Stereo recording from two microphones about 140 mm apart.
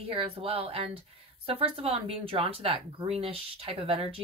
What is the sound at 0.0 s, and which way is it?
Speech, 40° right (ahead or behind).